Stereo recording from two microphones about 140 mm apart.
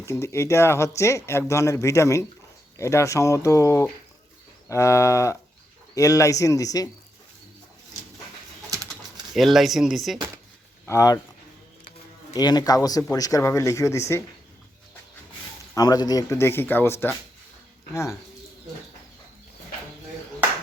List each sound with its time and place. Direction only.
0.0 s speech: 20° left (ahead or behind)
9.3 s speech: centre (ahead or behind)
10.8 s speech: 25° left (ahead or behind)
12.3 s speech: 30° left (ahead or behind)
15.7 s speech: 25° left (ahead or behind)